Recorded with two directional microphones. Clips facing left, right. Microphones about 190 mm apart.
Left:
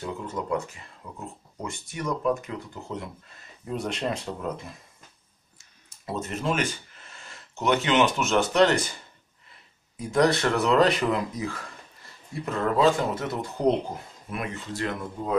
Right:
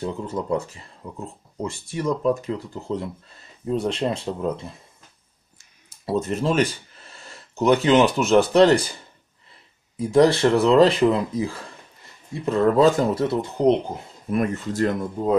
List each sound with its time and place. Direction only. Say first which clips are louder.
0.0 s speech: right 5 dB; 30° right (ahead or behind)
5.9 s speech: right 8 dB; 35° right (ahead or behind)
9.9 s speech: right 6 dB; 30° right (ahead or behind)
14.3 s speech: right 10 dB; 45° right (ahead or behind)